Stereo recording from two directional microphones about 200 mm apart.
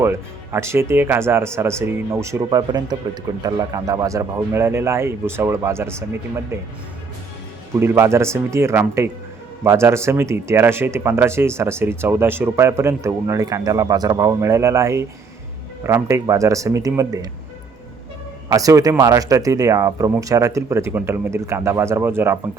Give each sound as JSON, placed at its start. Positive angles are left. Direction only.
{"t": 0.0, "sound": "speech", "side_deg": -10}
{"t": 7.7, "sound": "speech", "side_deg": -10}
{"t": 18.4, "sound": "speech", "side_deg": -15}